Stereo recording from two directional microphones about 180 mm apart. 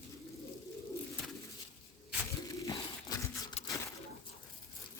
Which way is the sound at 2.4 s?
20° left (ahead or behind).